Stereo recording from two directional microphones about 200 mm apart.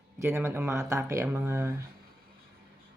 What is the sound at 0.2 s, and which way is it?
Speech, 10° right (ahead or behind).